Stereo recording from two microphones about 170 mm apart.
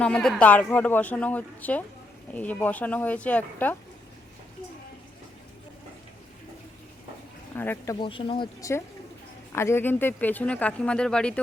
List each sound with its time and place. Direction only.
0.0 s speech: 5° left (ahead or behind)
7.5 s speech: 10° left (ahead or behind)
8.0 s speech: 30° left (ahead or behind)
9.5 s speech: 15° left (ahead or behind)